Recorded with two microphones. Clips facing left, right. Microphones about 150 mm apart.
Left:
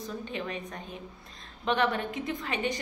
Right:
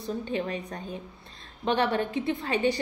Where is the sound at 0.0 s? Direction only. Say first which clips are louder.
Right 5 dB; 35° right (ahead or behind).